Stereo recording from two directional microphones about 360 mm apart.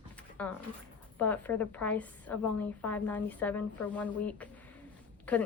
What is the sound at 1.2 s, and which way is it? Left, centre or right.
A woman's voice, centre.